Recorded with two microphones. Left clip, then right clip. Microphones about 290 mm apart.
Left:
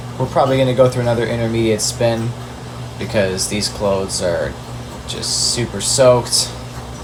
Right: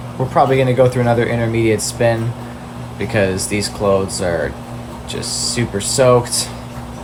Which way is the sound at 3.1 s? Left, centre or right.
Right.